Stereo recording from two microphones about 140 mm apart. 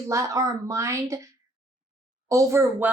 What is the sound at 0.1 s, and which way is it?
Speech, 20° right (ahead or behind).